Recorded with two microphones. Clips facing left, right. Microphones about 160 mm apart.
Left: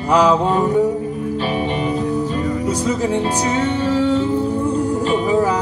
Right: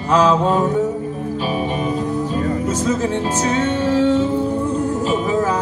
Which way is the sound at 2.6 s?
15° left (ahead or behind).